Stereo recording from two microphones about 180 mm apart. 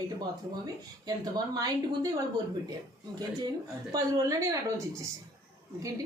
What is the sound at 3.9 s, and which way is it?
Speech, 20° right (ahead or behind).